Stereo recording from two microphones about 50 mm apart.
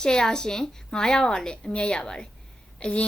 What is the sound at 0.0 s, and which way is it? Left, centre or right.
Speech, centre.